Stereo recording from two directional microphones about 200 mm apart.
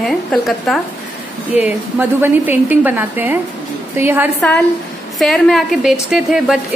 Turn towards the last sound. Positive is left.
turn(degrees=0)  # may be behind; listen again after turning